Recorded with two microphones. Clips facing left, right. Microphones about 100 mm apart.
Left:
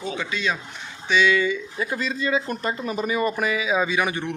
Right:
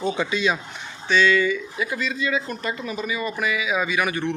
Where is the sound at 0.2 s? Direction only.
20° right (ahead or behind).